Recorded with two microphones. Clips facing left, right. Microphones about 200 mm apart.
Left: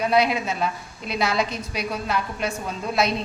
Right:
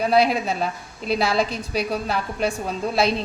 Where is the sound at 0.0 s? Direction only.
35° right (ahead or behind).